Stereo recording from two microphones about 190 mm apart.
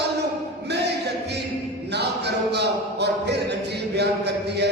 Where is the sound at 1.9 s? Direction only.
60° right (ahead or behind).